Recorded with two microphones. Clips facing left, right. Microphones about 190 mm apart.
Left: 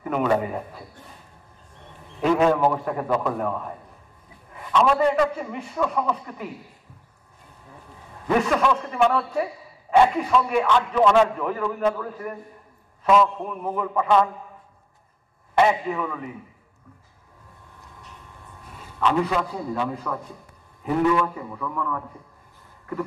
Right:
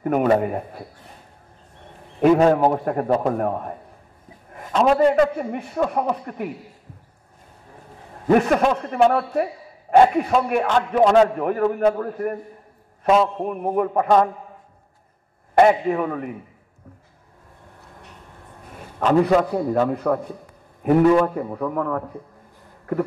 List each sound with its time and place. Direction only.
0.0 s a man's voice: 50° right (ahead or behind)
2.3 s a man's voice: 40° right (ahead or behind)
8.3 s a man's voice: 55° right (ahead or behind)
8.5 s a man's voice: 40° right (ahead or behind)
11.4 s a man's voice: 55° right (ahead or behind)
13.4 s a man's voice: 50° right (ahead or behind)
15.5 s a man's voice: 50° right (ahead or behind)
18.8 s a man's voice: 45° right (ahead or behind)
21.1 s a man's voice: 40° right (ahead or behind)